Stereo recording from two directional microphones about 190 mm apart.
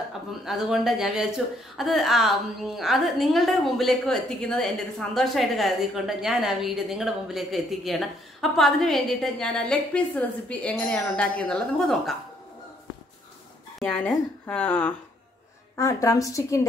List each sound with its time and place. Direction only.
0.3 s speech: centre (ahead or behind)
14.5 s a woman's voice: 10° left (ahead or behind)